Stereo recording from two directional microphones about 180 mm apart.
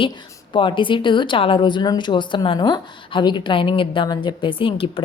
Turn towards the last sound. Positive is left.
turn(degrees=30)  # may be behind; listen again after turning